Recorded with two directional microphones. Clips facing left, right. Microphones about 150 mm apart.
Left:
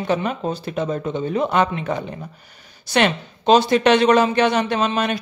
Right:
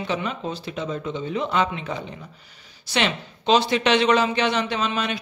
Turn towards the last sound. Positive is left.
turn(degrees=50)  # may be behind; listen again after turning